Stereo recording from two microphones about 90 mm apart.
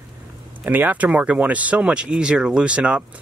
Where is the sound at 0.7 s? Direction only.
20° right (ahead or behind).